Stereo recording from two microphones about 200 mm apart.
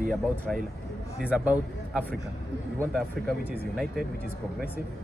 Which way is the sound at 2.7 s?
10° left (ahead or behind).